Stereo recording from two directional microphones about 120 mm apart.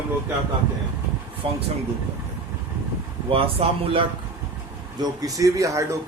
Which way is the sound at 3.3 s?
50° right (ahead or behind).